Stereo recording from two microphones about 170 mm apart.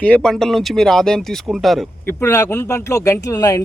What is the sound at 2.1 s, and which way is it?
Speech, 15° left (ahead or behind).